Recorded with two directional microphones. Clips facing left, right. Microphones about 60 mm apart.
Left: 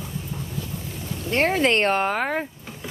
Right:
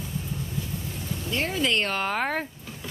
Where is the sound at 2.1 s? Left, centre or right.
Centre.